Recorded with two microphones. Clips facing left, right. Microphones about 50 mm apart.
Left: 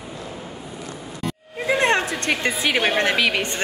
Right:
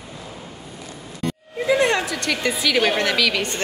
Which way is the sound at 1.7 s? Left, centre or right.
Left.